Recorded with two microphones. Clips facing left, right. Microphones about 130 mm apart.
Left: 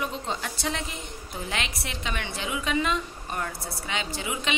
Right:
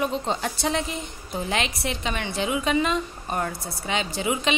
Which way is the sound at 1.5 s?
25° right (ahead or behind).